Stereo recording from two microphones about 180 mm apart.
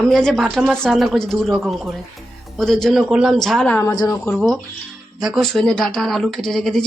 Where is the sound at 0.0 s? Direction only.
Centre (ahead or behind).